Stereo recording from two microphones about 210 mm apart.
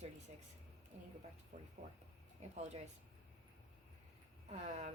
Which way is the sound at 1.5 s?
35° right (ahead or behind).